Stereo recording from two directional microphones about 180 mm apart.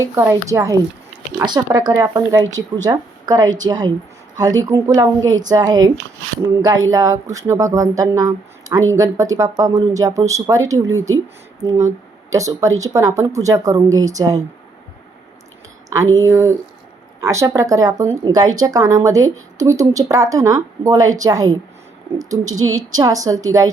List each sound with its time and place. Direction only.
0.0 s a woman's voice: 15° right (ahead or behind)
6.9 s a woman's voice: 20° right (ahead or behind)
12.3 s a woman's voice: 20° right (ahead or behind)
15.9 s a woman's voice: 20° right (ahead or behind)